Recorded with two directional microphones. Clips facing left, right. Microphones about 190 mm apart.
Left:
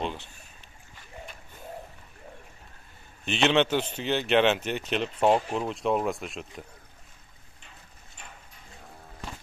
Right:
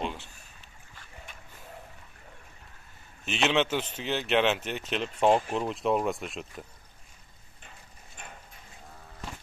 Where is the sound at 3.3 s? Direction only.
Centre (ahead or behind).